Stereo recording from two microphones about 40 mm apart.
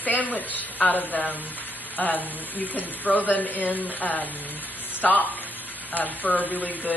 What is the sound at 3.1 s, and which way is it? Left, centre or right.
A man's voice, left.